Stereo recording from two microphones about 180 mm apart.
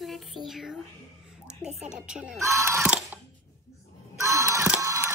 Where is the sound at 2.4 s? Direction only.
15° right (ahead or behind).